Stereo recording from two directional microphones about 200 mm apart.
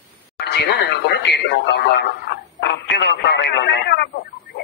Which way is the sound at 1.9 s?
60° left (ahead or behind).